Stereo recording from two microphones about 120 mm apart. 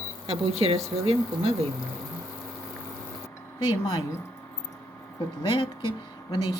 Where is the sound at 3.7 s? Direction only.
35° left (ahead or behind).